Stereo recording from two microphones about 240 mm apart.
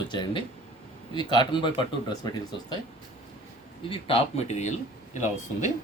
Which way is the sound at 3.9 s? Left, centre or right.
Left.